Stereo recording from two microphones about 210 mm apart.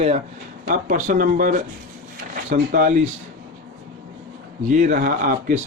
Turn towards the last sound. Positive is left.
turn(degrees=-40)  # may be behind; listen again after turning